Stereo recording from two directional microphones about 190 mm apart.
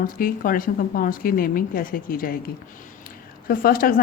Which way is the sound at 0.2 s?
50° left (ahead or behind).